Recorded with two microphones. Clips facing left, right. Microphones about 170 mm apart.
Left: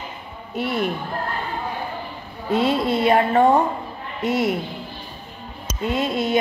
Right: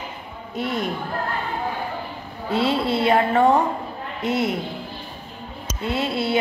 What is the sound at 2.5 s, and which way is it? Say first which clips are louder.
Speech: left 2 dB; 10° left (ahead or behind).